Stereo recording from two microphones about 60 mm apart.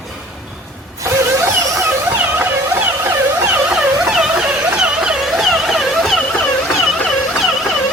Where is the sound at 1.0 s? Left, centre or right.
Right.